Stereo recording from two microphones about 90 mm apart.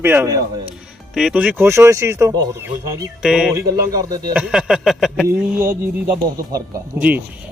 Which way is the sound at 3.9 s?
45° right (ahead or behind).